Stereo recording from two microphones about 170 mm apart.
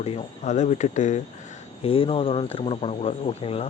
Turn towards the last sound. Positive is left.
turn(degrees=35)  # may be behind; listen again after turning